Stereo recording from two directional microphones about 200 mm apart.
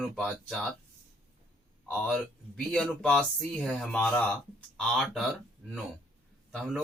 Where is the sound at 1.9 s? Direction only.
5° left (ahead or behind).